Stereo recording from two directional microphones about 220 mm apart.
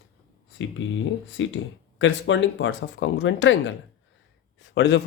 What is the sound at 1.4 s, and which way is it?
Speech, 60° left (ahead or behind).